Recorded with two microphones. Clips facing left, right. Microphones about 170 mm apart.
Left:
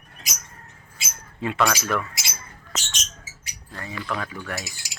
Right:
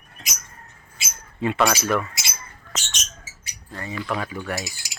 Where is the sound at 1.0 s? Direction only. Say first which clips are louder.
Right 4 dB; 5° right (ahead or behind).